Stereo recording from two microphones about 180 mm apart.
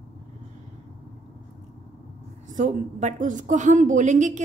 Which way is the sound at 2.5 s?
40° right (ahead or behind).